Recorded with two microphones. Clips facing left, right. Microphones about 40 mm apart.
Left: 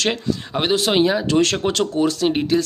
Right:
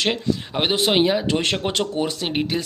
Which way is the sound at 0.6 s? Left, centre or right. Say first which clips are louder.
Left 2 dB; centre.